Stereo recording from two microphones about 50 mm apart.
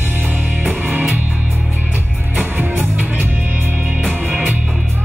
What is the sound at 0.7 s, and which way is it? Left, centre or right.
Music, right.